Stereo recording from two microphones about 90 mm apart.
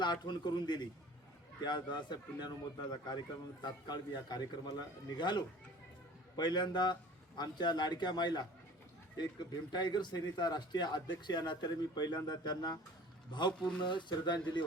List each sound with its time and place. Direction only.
0.0 s a man's voice: 55° left (ahead or behind)